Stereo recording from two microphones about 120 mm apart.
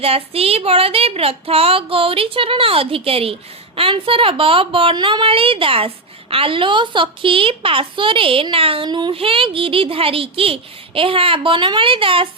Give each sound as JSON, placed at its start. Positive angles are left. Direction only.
{"t": 0.0, "sound": "a woman's voice", "side_deg": -55}